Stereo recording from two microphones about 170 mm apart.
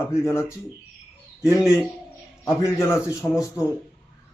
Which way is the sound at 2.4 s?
15° left (ahead or behind).